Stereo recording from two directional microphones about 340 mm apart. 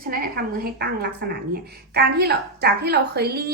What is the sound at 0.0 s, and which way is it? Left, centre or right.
A woman's voice, right.